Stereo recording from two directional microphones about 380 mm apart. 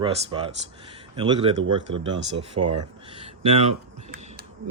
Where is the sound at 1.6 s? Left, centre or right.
Right.